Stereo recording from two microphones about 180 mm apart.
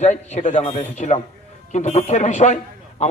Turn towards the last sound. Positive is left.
turn(degrees=40)  # may be behind; listen again after turning